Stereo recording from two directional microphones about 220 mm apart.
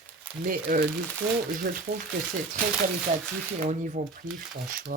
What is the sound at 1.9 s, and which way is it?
Speech, 45° right (ahead or behind).